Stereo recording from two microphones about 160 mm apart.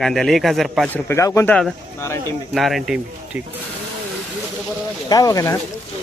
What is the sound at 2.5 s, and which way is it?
Speech, centre (ahead or behind).